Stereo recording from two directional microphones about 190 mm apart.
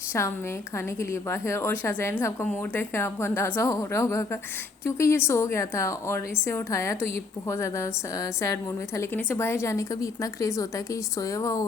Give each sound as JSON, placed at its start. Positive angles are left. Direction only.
{"t": 0.1, "sound": "a woman's voice", "side_deg": 15}